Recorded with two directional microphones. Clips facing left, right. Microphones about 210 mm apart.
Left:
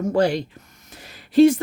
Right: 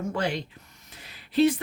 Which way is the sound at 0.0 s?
40° left (ahead or behind).